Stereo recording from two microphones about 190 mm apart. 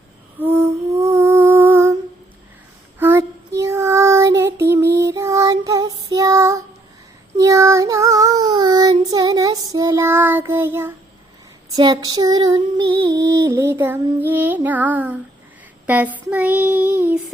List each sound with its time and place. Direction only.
0.9 s lullaby: 15° right (ahead or behind)
3.0 s child singing: 10° right (ahead or behind)
11.7 s female singing: 20° right (ahead or behind)
15.9 s child singing: 10° right (ahead or behind)